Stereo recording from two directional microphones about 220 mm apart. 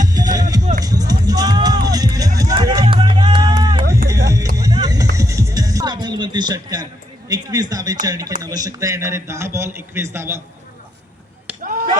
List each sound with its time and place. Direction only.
0.0 s music: 15° right (ahead or behind)
3.6 s run: 20° right (ahead or behind)
4.5 s music: 15° right (ahead or behind)
7.3 s speech: 15° right (ahead or behind)
11.6 s a sound: 40° right (ahead or behind)